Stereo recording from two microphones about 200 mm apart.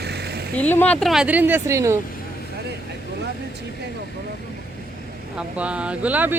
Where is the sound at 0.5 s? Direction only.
10° left (ahead or behind); by 2.0 s 15° right (ahead or behind).